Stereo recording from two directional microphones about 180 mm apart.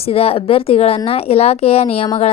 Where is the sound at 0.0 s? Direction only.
35° left (ahead or behind).